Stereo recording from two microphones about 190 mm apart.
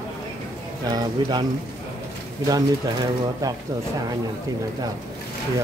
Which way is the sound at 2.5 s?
20° right (ahead or behind).